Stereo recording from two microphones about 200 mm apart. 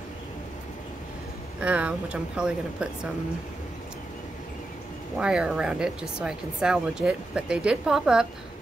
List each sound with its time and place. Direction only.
1.6 s speech: 5° right (ahead or behind)
5.2 s speech: 5° right (ahead or behind)